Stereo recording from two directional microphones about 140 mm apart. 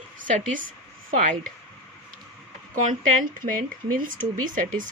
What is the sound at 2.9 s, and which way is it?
Speech, 75° right (ahead or behind).